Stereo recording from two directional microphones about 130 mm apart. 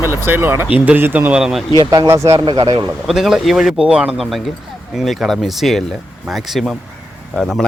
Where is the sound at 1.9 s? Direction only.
25° right (ahead or behind).